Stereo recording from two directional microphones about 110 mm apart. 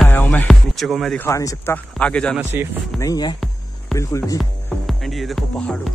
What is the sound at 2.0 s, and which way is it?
Speech, 10° left (ahead or behind).